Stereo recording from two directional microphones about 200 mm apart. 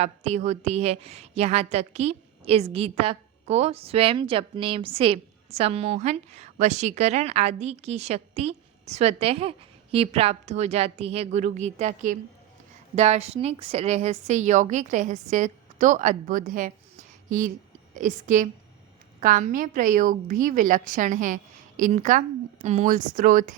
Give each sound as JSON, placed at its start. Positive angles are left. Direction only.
{"t": 0.0, "sound": "a woman's voice", "side_deg": -35}